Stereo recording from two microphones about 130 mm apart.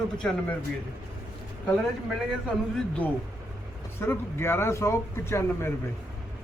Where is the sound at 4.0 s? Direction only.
20° left (ahead or behind).